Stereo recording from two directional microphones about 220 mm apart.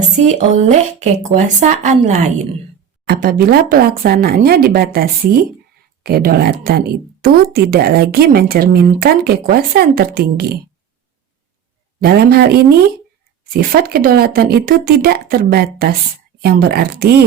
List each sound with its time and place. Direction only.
0.3 s speech: 30° right (ahead or behind)
12.0 s speech: 45° right (ahead or behind)
13.5 s speech: 45° right (ahead or behind)